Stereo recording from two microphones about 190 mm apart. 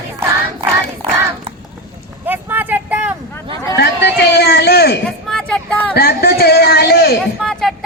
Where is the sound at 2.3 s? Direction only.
10° right (ahead or behind).